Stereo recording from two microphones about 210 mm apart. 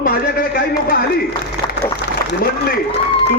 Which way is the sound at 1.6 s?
50° right (ahead or behind).